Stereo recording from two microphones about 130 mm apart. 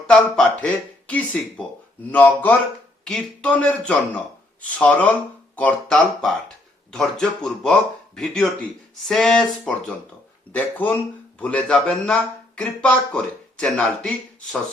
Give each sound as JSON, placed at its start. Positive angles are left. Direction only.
{"t": 0.1, "sound": "speech", "side_deg": 5}
{"t": 3.0, "sound": "speech", "side_deg": 5}